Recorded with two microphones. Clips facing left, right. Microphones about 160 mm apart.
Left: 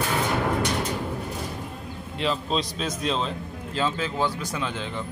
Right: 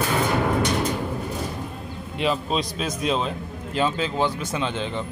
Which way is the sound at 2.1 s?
10° right (ahead or behind).